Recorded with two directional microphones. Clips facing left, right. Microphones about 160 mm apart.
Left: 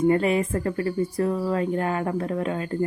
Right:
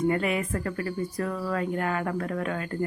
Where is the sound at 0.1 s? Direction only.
30° left (ahead or behind).